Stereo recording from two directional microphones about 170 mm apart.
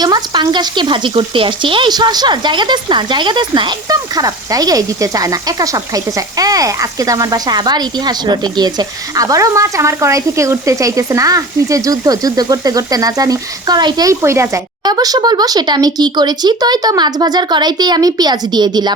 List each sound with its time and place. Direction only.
0.0 s speech: 25° right (ahead or behind)